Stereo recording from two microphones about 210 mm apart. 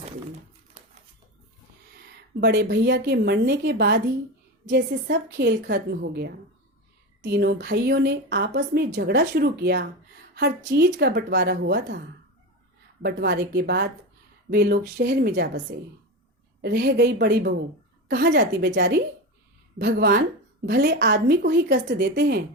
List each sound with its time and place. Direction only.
2.4 s a woman's voice: 55° right (ahead or behind)
13.0 s a woman's voice: 50° right (ahead or behind)